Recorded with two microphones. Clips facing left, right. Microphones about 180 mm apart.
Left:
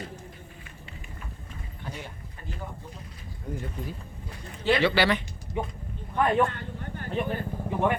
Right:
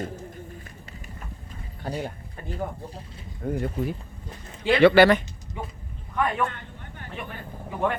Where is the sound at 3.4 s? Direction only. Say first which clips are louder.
Right 8 dB; 60° right (ahead or behind).